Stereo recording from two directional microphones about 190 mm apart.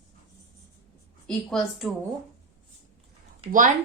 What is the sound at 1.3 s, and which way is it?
Speech, 5° left (ahead or behind).